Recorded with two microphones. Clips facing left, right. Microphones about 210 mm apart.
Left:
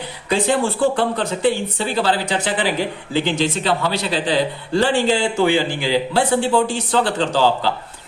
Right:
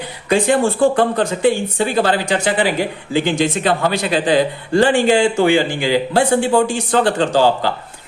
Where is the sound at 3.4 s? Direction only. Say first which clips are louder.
Right 3 dB; 50° right (ahead or behind).